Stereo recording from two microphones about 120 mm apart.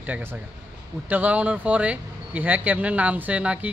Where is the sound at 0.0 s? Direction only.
15° right (ahead or behind).